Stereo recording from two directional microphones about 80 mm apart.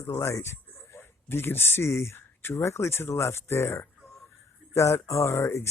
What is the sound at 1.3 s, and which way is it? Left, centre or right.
Speech, left.